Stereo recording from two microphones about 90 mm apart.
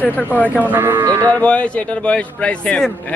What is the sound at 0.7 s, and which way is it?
Speech, 25° right (ahead or behind).